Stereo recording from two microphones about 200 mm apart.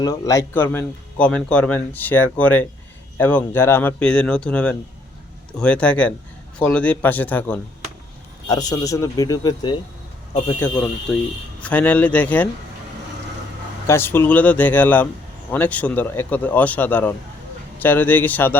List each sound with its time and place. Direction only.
0.0 s speech: 15° left (ahead or behind)
8.4 s a man's voice: 20° left (ahead or behind)
13.8 s speech: 10° left (ahead or behind)